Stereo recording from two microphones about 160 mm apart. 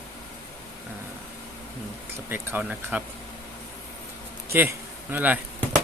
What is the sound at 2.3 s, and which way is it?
Speech, 10° right (ahead or behind).